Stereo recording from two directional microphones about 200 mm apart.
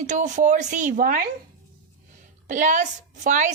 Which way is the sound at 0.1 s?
40° right (ahead or behind).